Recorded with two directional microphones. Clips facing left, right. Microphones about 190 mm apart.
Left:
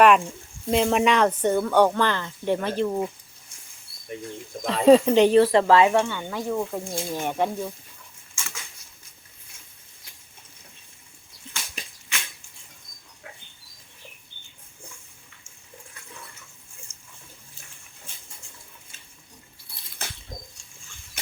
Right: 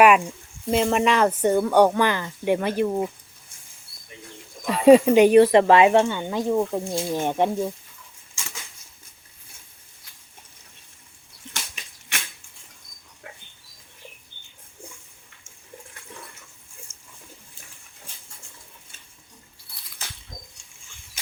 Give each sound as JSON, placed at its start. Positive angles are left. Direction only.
{"t": 0.0, "sound": "speech", "side_deg": -10}
{"t": 4.1, "sound": "speech", "side_deg": 45}
{"t": 4.6, "sound": "speech", "side_deg": -10}